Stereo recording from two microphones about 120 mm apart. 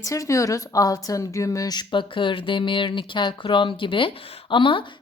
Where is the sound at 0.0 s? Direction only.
25° left (ahead or behind).